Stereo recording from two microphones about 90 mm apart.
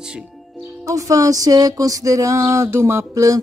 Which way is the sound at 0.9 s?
40° right (ahead or behind).